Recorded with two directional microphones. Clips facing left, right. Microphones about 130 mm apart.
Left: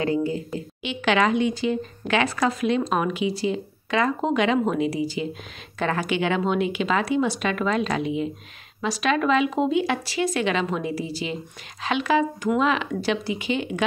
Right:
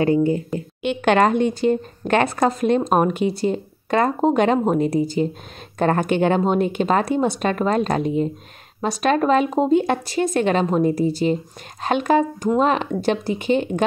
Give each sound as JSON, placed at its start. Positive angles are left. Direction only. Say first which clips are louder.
{"t": 0.0, "sound": "speech", "louder": "right 6 dB", "side_deg": -25}
{"t": 0.8, "sound": "speech", "louder": "right 5 dB", "side_deg": -50}